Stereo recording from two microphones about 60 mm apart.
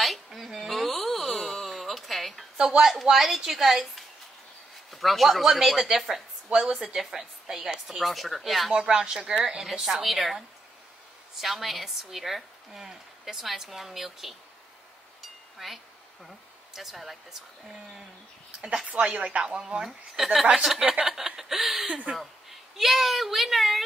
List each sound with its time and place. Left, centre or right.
0.0 s a sound: centre
2.5 s a woman's voice: centre
8.7 s speech: centre
15.6 s a woman's voice: centre
18.9 s speech: right
20.8 s speech: centre
21.3 s a woman's voice: centre